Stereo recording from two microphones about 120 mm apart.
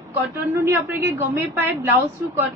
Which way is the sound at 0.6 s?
20° right (ahead or behind).